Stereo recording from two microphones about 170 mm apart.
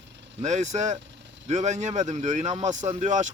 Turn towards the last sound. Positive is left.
turn(degrees=-45)  # may be behind; listen again after turning